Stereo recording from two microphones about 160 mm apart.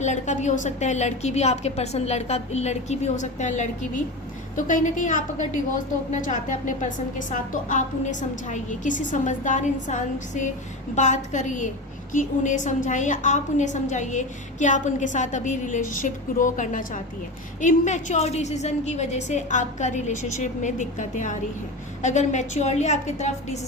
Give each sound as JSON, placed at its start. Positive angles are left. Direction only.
{"t": 0.0, "sound": "a woman's voice", "side_deg": 50}